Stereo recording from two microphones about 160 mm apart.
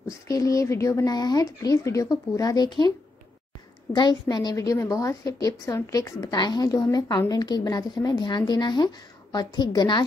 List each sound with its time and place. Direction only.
0.1 s a woman's voice: 20° left (ahead or behind)
3.9 s a woman's voice: 25° left (ahead or behind)